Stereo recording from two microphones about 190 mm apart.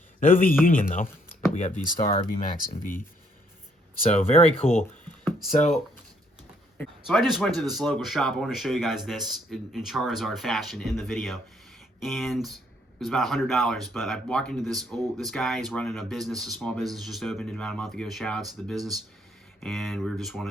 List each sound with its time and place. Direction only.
0.6 s speech: 45° left (ahead or behind)
4.1 s speech: 30° left (ahead or behind)
4.7 s a sound: 10° left (ahead or behind)
5.5 s speech: 40° left (ahead or behind)
6.7 s speech: centre (ahead or behind)